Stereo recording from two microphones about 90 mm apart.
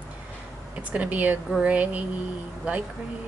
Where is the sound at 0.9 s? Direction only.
15° right (ahead or behind).